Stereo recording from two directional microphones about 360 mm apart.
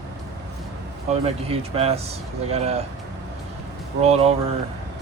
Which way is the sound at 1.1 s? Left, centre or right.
Centre.